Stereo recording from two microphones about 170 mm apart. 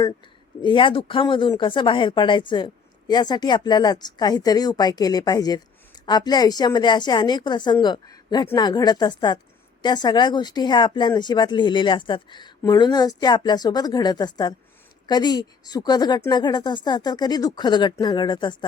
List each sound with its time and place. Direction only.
0.6 s speech: 30° left (ahead or behind)